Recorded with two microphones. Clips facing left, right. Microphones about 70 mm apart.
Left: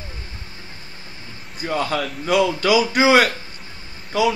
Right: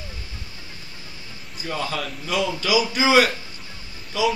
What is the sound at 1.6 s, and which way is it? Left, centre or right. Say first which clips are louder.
A man's voice: left 5 dB; left.